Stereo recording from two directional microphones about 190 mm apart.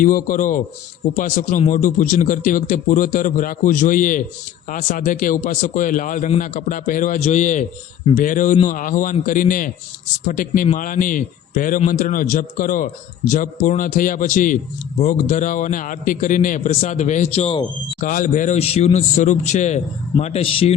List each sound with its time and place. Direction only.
0.0 s a man's voice: 45° left (ahead or behind); by 17.7 s 30° left (ahead or behind)
18.0 s a man's voice: 45° left (ahead or behind)